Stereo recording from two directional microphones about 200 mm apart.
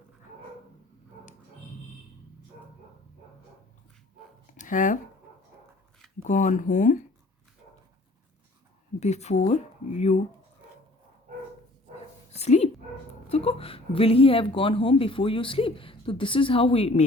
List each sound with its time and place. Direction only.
4.5 s a sound: 40° left (ahead or behind)
6.2 s speech: 40° left (ahead or behind)
9.0 s speech: 35° left (ahead or behind)
12.3 s speech: 30° left (ahead or behind)